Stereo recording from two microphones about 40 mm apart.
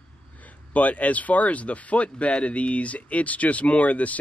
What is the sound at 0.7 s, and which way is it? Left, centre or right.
Speech, left.